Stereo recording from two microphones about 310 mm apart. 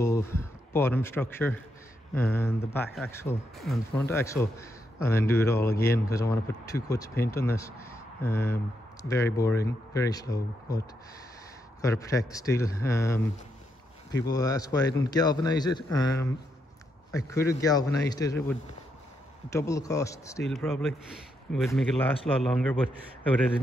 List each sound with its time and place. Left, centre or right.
0.0 s speech: centre
11.8 s a man's voice: centre